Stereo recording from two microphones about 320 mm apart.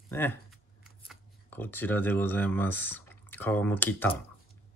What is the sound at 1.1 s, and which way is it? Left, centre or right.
Speech, centre.